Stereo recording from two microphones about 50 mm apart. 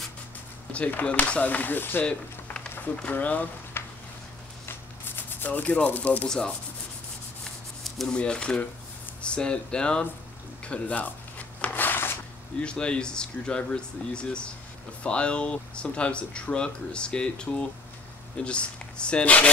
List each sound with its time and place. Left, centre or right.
0.7 s speech: left
3.1 s speech: left
3.8 s sizzle: left
4.6 s rub: left
5.9 s speech: left
6.2 s rub: centre
8.1 s speech: centre
11.0 s a sound: left
12.5 s speech: centre